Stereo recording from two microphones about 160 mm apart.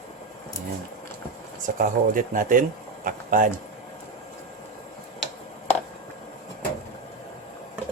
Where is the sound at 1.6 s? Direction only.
55° right (ahead or behind).